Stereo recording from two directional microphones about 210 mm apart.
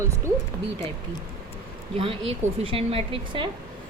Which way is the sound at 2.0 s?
25° right (ahead or behind).